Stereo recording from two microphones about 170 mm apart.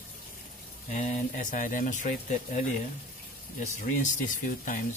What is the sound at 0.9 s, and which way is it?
Speech, 45° left (ahead or behind).